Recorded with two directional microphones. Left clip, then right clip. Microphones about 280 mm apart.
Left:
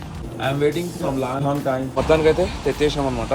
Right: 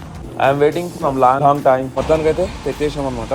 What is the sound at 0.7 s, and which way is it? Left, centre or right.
Speech, centre.